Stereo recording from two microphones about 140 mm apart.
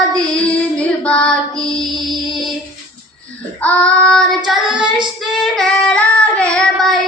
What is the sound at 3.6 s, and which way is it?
Child singing, 10° left (ahead or behind).